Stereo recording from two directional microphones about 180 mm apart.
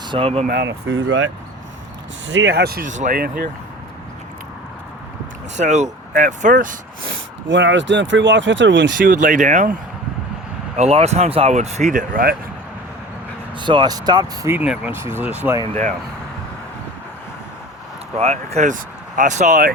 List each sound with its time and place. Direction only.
0.1 s speech: 30° right (ahead or behind)
0.4 s speech: 70° right (ahead or behind); by 3.2 s 45° right (ahead or behind)
3.2 s speech: 55° right (ahead or behind)
5.5 s speech: 40° right (ahead or behind)
7.4 s speech: 90° right
9.0 s speech: 50° right (ahead or behind)
10.8 s speech: 35° right (ahead or behind); by 12.4 s 55° right (ahead or behind)
13.6 s speech: 25° right (ahead or behind)
14.5 s speech: 5° right (ahead or behind)
18.2 s speech: 35° right (ahead or behind)